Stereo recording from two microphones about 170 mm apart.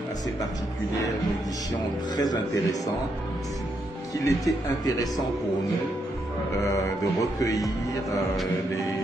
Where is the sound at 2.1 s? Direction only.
25° left (ahead or behind).